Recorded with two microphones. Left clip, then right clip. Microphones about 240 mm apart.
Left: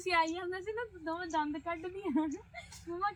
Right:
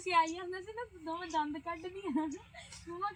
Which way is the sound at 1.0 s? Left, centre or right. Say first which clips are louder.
Even; centre.